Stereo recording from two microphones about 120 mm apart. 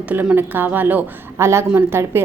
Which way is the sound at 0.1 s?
15° right (ahead or behind).